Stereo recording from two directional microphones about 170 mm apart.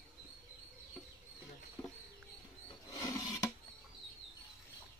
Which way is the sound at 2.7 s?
20° left (ahead or behind).